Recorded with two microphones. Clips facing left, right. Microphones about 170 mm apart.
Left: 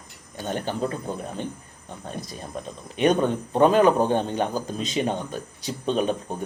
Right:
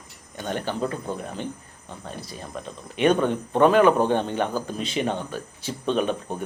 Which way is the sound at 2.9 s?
40° left (ahead or behind).